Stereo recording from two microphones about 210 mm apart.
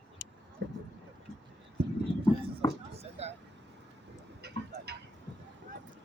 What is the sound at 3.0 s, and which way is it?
Vehicle, 30° right (ahead or behind).